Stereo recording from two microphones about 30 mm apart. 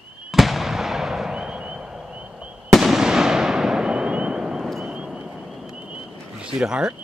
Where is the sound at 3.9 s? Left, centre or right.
Right.